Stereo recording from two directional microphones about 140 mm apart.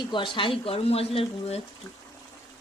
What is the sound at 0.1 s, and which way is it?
Speech, 35° left (ahead or behind).